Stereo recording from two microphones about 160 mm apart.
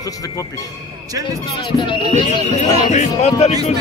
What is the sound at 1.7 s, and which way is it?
Speech, 30° left (ahead or behind).